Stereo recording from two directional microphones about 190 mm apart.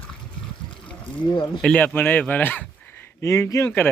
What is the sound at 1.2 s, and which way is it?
Speech, 25° left (ahead or behind).